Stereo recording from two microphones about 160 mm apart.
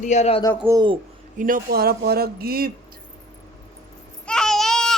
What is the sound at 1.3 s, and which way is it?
A man's voice, 60° right (ahead or behind).